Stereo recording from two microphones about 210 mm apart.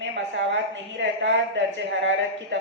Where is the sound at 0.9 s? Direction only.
55° right (ahead or behind).